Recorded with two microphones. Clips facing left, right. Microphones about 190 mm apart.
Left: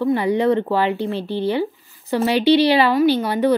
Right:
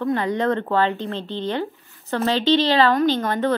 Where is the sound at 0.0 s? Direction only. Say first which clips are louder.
Left 4 dB; 10° left (ahead or behind).